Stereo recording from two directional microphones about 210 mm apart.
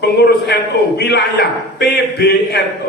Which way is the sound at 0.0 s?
50° left (ahead or behind).